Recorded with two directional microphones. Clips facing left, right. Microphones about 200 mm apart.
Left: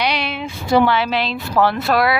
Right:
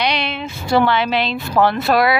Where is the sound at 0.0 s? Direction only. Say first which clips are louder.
Even; 10° left (ahead or behind).